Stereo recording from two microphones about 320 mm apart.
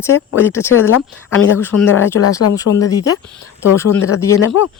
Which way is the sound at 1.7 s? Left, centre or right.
Left.